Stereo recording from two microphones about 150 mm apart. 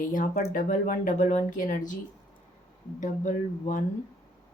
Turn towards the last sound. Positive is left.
turn(degrees=55)  # may be behind; listen again after turning